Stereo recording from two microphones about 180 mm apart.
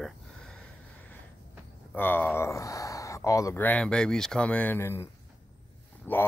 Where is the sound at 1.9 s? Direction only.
10° left (ahead or behind).